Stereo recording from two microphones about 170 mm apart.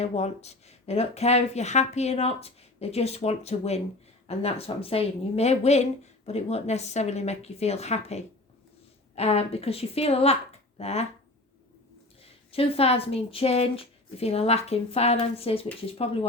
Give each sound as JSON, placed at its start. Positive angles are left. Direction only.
{"t": 0.0, "sound": "speech", "side_deg": 40}
{"t": 12.2, "sound": "speech", "side_deg": 35}